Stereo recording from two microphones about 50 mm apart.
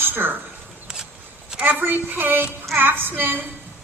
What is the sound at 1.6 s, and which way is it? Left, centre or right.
Speech, right.